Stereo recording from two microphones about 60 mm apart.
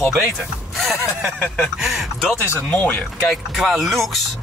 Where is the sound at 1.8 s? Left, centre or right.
Centre.